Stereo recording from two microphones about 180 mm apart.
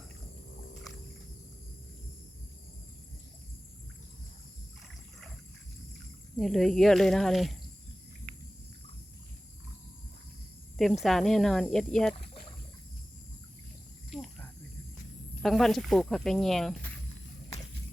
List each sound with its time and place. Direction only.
6.3 s speech: centre (ahead or behind)
11.0 s speech: centre (ahead or behind)
14.1 s cricket: centre (ahead or behind)
15.4 s speech: centre (ahead or behind)